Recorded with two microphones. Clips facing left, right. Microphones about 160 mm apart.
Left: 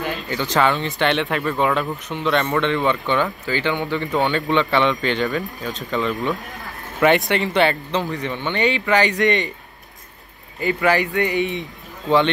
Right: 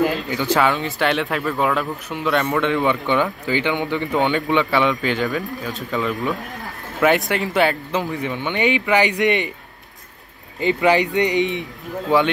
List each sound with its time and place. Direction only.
0.3 s speech: 10° right (ahead or behind)
10.6 s speech: 20° right (ahead or behind)